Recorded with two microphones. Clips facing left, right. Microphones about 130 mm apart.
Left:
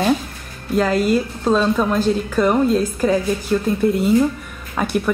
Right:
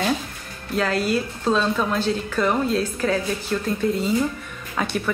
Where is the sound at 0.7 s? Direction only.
Centre (ahead or behind).